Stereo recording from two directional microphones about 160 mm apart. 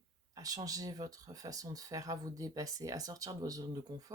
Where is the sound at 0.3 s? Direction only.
20° right (ahead or behind).